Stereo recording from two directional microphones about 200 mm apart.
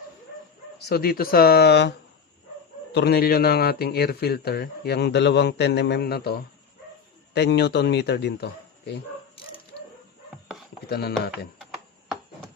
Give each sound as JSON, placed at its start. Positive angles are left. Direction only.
{"t": 0.9, "sound": "speech", "side_deg": 50}
{"t": 2.9, "sound": "speech", "side_deg": 55}
{"t": 10.8, "sound": "speech", "side_deg": 50}